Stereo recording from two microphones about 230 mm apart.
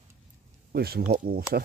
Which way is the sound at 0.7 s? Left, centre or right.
Right.